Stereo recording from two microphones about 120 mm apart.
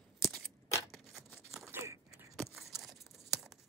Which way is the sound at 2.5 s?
Centre (ahead or behind).